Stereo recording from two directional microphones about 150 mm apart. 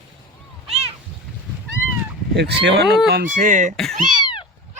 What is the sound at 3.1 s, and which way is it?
Speech, 75° right (ahead or behind).